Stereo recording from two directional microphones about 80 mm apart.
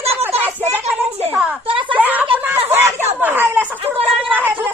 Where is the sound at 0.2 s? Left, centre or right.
Right.